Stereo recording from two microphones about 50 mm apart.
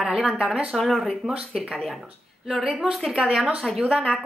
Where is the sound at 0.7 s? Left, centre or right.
Centre.